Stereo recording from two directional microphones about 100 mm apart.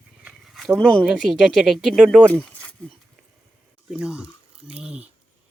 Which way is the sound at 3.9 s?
10° right (ahead or behind).